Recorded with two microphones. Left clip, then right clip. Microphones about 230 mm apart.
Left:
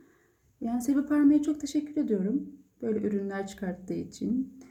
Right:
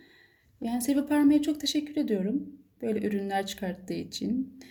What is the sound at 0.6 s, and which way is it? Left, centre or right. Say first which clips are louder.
Speech: even; centre.